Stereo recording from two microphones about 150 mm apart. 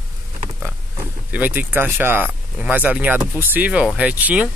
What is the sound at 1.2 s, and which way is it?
Speech, 10° right (ahead or behind).